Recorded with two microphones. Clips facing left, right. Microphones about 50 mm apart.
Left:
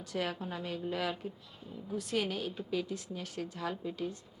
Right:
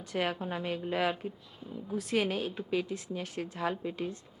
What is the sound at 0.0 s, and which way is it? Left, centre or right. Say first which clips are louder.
A woman's voice: right 3 dB; right.